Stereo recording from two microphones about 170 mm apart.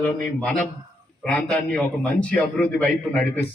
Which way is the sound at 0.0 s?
5° left (ahead or behind).